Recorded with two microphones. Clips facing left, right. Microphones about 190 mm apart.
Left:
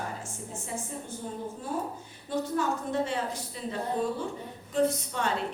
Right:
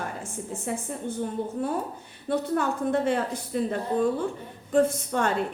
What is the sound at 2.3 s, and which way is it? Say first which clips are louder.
A woman's voice: right 3 dB; 60° right (ahead or behind).